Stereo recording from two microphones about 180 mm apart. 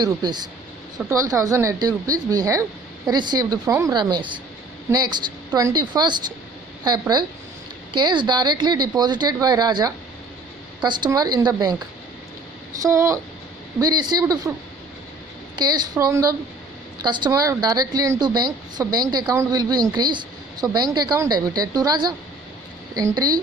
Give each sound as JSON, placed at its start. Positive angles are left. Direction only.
{"t": 0.0, "sound": "a woman's voice", "side_deg": -25}
{"t": 7.9, "sound": "a woman's voice", "side_deg": -25}
{"t": 12.8, "sound": "a woman's voice", "side_deg": -15}
{"t": 15.5, "sound": "a woman's voice", "side_deg": -25}